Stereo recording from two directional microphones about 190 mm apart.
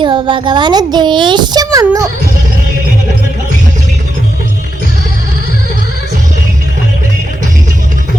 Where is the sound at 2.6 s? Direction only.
45° right (ahead or behind).